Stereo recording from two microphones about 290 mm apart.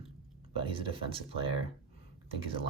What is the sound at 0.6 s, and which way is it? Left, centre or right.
Speech, centre.